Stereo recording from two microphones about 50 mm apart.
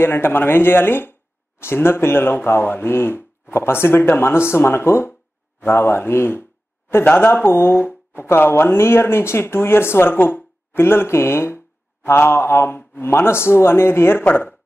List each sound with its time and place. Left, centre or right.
0.0 s speech: left
14.2 s speech: left